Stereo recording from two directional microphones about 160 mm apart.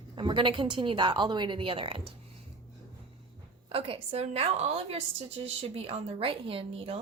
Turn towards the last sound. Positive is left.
turn(degrees=-35)  # may be behind; listen again after turning